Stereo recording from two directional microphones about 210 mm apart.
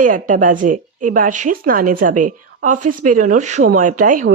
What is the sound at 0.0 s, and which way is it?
Speech, 40° right (ahead or behind).